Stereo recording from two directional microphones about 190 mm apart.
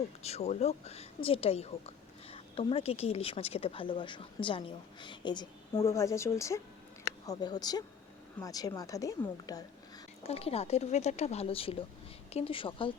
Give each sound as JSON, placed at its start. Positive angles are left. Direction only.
{"t": 0.2, "sound": "a woman's voice", "side_deg": 35}
{"t": 10.2, "sound": "a woman's voice", "side_deg": 30}